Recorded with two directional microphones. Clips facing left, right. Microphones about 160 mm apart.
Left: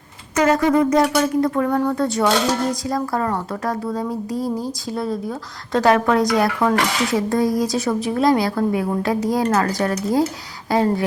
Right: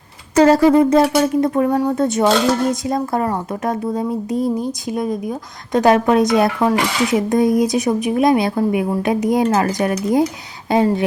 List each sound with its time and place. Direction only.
0.3 s speech: 30° right (ahead or behind)